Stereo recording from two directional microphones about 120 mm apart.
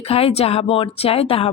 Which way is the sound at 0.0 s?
55° left (ahead or behind).